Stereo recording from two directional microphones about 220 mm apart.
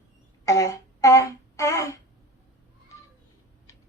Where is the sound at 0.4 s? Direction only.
15° left (ahead or behind).